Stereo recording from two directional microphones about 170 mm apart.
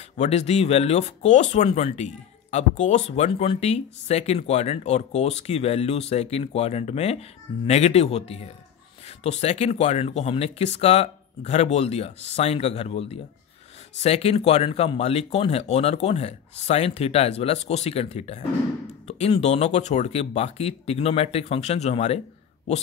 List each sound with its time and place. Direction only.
0.2 s speech: 40° left (ahead or behind)